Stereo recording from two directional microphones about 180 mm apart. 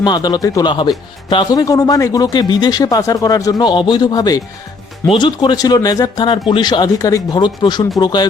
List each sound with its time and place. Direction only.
0.0 s a man's voice: 25° left (ahead or behind)